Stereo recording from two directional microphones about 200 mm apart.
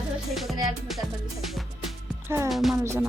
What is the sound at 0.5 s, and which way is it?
Music, 20° right (ahead or behind).